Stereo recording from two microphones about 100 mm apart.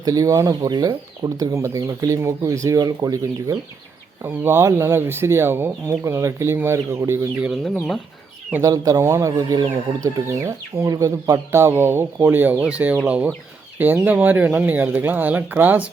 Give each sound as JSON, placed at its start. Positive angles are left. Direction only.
{"t": 0.0, "sound": "speech", "side_deg": -35}
{"t": 4.2, "sound": "speech", "side_deg": -20}
{"t": 7.5, "sound": "speech", "side_deg": 5}
{"t": 8.6, "sound": "speech", "side_deg": -35}